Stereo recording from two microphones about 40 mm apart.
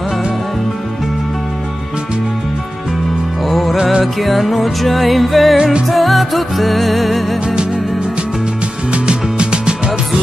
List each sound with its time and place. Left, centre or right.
3.4 s music: centre
5.6 s music: right
5.9 s music: centre
8.9 s music: right